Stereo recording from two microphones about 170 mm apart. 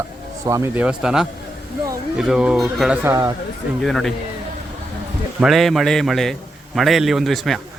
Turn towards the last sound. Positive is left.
turn(degrees=0)  # may be behind; listen again after turning